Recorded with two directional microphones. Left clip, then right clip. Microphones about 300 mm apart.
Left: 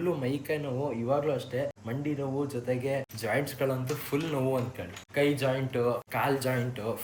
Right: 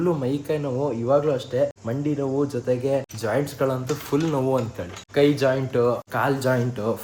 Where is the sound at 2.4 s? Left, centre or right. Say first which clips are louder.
Right 8 dB; centre.